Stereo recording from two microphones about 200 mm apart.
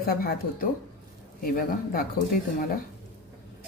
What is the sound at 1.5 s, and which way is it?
Speech, 45° left (ahead or behind).